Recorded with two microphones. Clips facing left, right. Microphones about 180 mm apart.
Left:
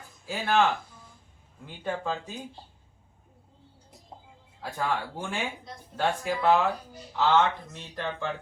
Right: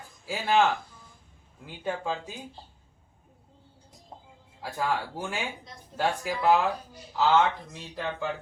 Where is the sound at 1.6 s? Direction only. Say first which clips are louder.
Even; 10° right (ahead or behind).